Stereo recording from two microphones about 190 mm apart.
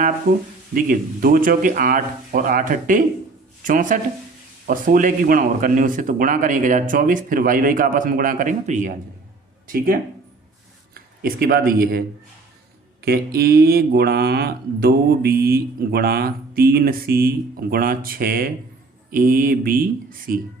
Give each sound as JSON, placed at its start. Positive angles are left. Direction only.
{"t": 0.7, "sound": "speech", "side_deg": -50}
{"t": 9.7, "sound": "speech", "side_deg": -50}